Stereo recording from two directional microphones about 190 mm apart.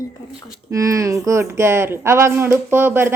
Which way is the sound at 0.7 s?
15° right (ahead or behind).